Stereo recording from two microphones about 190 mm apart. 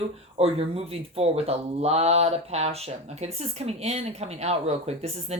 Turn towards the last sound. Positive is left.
turn(degrees=-35)  # may be behind; listen again after turning